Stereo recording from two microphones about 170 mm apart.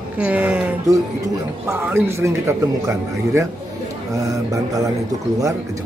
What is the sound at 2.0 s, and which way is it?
Speech, 15° right (ahead or behind).